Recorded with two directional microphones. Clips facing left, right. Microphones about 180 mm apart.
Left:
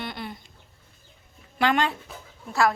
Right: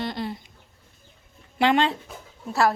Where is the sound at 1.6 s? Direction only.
25° right (ahead or behind).